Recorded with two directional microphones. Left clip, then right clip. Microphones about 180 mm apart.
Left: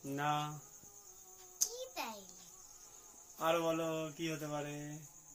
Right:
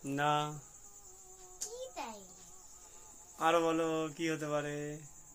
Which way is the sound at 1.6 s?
Centre (ahead or behind).